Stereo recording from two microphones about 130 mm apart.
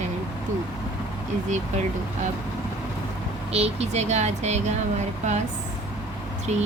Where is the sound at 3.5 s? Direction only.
55° right (ahead or behind).